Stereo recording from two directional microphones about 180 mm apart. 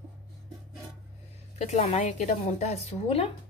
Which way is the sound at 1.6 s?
40° left (ahead or behind).